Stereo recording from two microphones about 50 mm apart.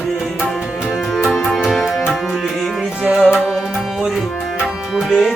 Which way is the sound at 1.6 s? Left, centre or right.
Centre.